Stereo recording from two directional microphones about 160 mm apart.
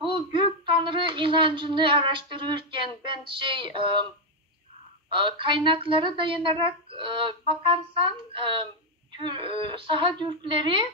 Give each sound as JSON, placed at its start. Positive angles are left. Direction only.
{"t": 0.0, "sound": "a woman's voice", "side_deg": -30}
{"t": 5.1, "sound": "a woman's voice", "side_deg": -30}